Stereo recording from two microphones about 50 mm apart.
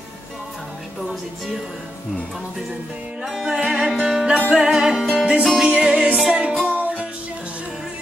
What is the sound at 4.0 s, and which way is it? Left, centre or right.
Music, centre.